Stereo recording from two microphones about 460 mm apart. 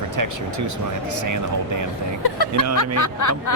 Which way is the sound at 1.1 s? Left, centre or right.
Right.